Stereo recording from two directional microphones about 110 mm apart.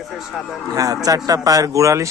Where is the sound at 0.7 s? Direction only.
35° right (ahead or behind).